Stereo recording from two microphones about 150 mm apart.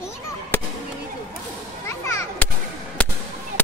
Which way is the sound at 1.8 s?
20° left (ahead or behind).